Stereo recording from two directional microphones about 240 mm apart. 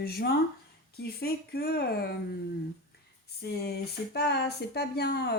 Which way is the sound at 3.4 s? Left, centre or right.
Left.